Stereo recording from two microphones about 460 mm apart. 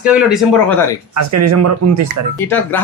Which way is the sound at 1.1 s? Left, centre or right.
Right.